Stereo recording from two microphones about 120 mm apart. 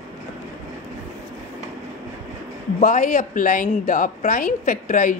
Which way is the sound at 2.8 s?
90° left.